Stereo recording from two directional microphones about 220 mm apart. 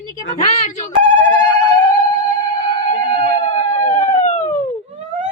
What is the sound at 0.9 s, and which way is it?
Speech, 30° right (ahead or behind).